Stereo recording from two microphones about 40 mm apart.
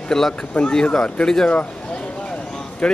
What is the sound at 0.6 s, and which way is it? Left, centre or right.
Speech, left.